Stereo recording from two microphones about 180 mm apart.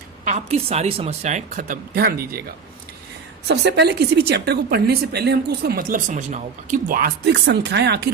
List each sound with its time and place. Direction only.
0.3 s speech: 35° right (ahead or behind); by 2.4 s 55° right (ahead or behind)
3.4 s speech: 70° right (ahead or behind)